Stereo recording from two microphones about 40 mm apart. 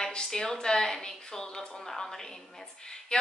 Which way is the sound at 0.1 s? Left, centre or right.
Centre.